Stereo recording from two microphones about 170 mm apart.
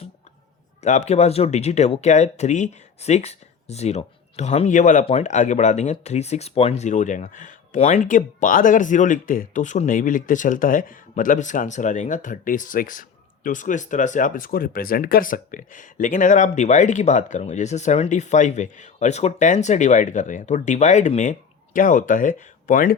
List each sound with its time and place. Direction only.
0.8 s speech: 40° left (ahead or behind)